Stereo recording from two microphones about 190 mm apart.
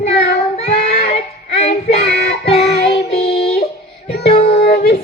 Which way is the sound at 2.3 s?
30° left (ahead or behind).